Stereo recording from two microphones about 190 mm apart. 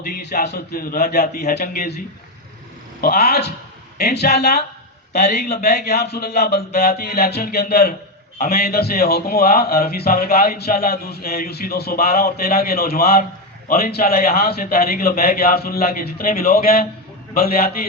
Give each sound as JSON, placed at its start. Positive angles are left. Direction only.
{"t": 0.1, "sound": "a man's voice", "side_deg": 55}
{"t": 3.0, "sound": "a man's voice", "side_deg": 55}